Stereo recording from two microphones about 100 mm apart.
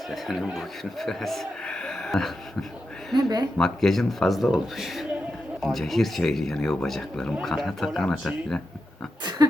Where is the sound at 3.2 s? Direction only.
45° right (ahead or behind).